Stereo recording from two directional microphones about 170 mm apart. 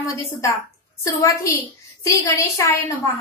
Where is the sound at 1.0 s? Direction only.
20° left (ahead or behind).